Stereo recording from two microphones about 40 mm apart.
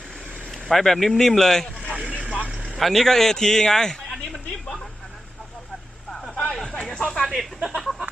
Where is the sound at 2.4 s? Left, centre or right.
Right.